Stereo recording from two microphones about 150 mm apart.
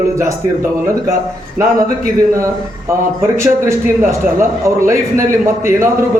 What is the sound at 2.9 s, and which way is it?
A man's voice, 20° right (ahead or behind).